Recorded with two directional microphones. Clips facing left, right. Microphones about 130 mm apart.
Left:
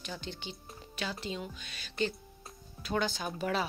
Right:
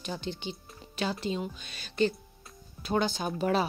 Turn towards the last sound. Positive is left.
turn(degrees=-30)  # may be behind; listen again after turning